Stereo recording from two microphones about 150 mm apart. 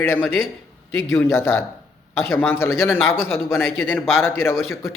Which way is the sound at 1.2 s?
15° left (ahead or behind).